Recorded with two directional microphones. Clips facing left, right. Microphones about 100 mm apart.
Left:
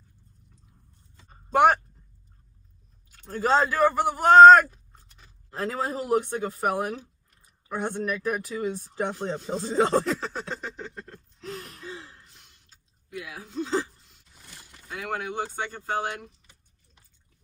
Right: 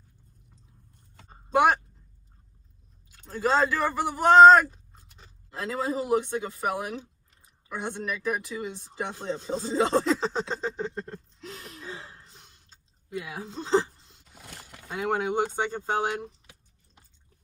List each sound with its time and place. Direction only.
3.2 s speech: 50° left (ahead or behind)
7.7 s speech: 45° left (ahead or behind)
9.9 s speech: 25° right (ahead or behind)
11.3 s gasp: 45° left (ahead or behind)
12.0 s a sound: 35° right (ahead or behind)
14.4 s a sound: 60° right (ahead or behind)
14.8 s speech: 25° right (ahead or behind)